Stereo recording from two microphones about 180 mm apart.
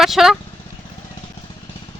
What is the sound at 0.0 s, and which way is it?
Speech, centre (ahead or behind).